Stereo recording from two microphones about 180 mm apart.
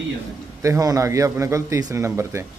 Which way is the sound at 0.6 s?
20° right (ahead or behind).